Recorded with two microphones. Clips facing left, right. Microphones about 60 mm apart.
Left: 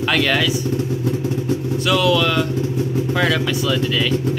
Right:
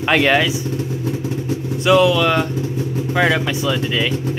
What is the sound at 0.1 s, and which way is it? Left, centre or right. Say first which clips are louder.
Speech: right 4 dB; right.